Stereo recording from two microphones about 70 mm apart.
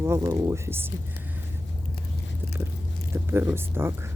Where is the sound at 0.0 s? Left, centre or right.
Right.